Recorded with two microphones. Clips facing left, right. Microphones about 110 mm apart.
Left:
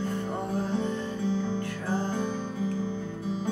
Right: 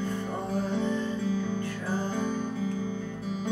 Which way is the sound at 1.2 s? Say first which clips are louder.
Left 1 dB; 30° left (ahead or behind).